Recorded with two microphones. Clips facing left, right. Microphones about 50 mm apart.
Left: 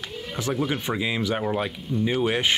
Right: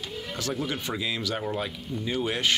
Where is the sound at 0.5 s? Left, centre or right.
Centre.